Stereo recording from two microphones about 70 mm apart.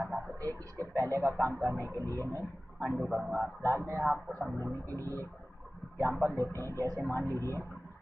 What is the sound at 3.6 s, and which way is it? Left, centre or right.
Speech, right.